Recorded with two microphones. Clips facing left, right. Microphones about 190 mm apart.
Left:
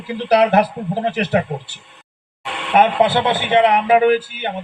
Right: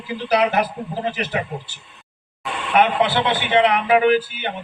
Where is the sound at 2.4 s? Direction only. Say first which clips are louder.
Even; 70° left (ahead or behind).